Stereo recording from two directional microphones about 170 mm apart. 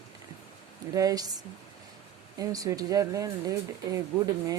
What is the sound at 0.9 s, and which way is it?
Speech, 20° right (ahead or behind).